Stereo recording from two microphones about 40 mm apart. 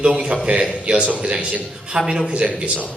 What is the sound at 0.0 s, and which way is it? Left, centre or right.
A man's voice, right.